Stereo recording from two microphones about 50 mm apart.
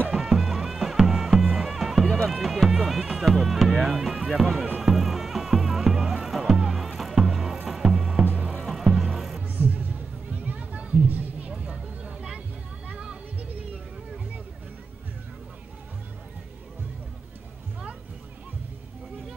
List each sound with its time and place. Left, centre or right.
0.1 s music: centre
3.8 s speech: centre
4.7 s music: centre
9.4 s a sound: right
11.5 s vehicle: centre
12.8 s a sound: right